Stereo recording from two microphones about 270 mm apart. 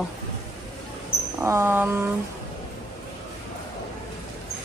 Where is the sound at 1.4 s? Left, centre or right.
Centre.